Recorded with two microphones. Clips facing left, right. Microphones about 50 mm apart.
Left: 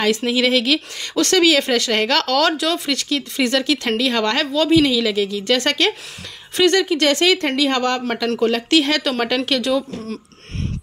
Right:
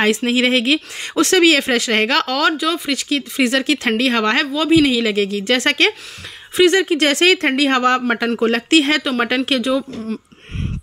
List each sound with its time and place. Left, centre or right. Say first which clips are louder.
0.0 s speech: right 2 dB; right; by 2.8 s centre
2.9 s speech: right 2 dB; right
4.5 s speech: left 1 dB; centre
5.1 s speech: right 1 dB; right
9.6 s speech: right 1 dB; centre